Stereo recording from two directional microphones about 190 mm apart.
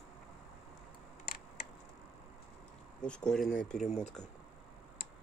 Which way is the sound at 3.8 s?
35° left (ahead or behind).